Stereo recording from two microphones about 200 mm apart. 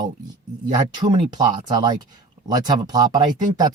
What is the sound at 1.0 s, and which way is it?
Speech, 20° right (ahead or behind).